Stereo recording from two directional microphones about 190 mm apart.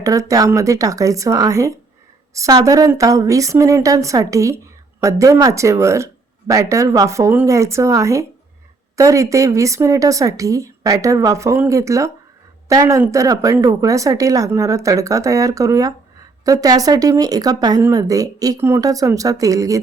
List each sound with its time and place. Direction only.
0.0 s a woman's voice: 15° right (ahead or behind)